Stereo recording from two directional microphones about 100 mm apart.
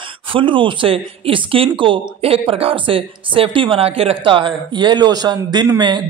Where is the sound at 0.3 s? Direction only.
60° right (ahead or behind).